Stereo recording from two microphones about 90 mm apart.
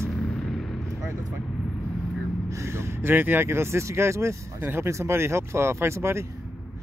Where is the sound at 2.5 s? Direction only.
30° right (ahead or behind).